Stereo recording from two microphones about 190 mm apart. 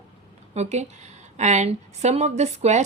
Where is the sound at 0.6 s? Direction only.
35° right (ahead or behind).